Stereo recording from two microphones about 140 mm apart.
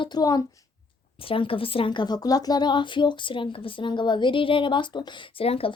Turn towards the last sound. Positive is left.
turn(degrees=45)  # may be behind; listen again after turning